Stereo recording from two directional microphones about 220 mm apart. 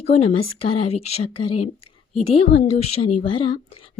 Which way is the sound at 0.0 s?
30° left (ahead or behind).